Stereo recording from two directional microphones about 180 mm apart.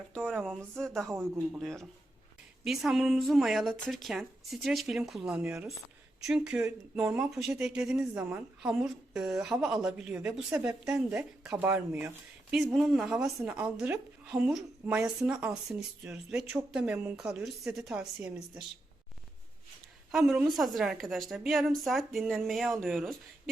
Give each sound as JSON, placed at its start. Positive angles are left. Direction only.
{"t": 0.1, "sound": "a sound", "side_deg": 5}
{"t": 0.4, "sound": "speech", "side_deg": 0}
{"t": 1.0, "sound": "speech", "side_deg": -15}
{"t": 1.4, "sound": "speech", "side_deg": 0}
{"t": 20.1, "sound": "speech", "side_deg": -5}